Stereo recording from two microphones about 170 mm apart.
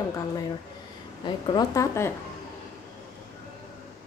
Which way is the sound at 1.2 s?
25° left (ahead or behind).